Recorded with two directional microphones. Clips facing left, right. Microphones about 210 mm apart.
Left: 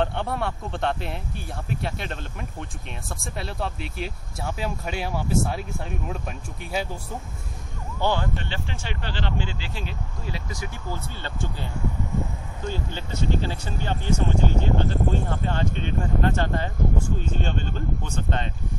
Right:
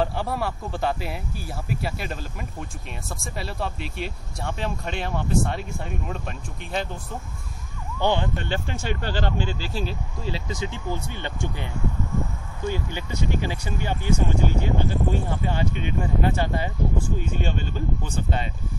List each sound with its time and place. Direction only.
0.0 s speech: 5° right (ahead or behind)
3.2 s speech: centre (ahead or behind)
8.0 s speech: 20° right (ahead or behind)
8.4 s speech: 45° right (ahead or behind); by 11.5 s 15° right (ahead or behind)
12.6 s speech: 15° right (ahead or behind)